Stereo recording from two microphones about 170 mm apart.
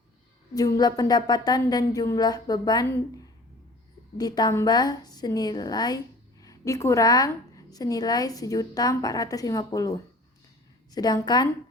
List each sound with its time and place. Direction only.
0.5 s a woman's voice: 20° left (ahead or behind)
4.2 s a woman's voice: 25° left (ahead or behind)
10.9 s a woman's voice: 25° left (ahead or behind)